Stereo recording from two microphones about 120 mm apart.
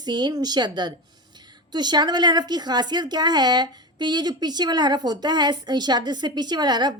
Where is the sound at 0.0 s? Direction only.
35° right (ahead or behind).